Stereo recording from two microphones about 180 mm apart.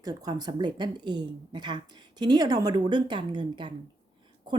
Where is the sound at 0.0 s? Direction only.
20° right (ahead or behind).